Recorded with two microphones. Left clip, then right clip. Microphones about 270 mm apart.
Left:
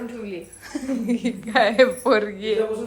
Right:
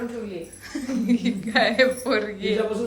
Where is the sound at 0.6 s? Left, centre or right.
Centre.